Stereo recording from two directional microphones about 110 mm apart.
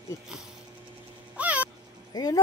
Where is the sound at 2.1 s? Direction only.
35° left (ahead or behind).